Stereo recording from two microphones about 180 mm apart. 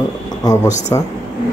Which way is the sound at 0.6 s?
40° left (ahead or behind).